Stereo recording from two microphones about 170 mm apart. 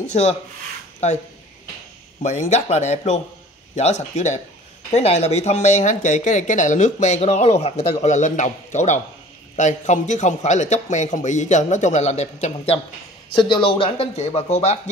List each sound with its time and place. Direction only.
0.1 s speech: 40° left (ahead or behind)
2.2 s speech: 40° left (ahead or behind)
13.3 s speech: 30° left (ahead or behind)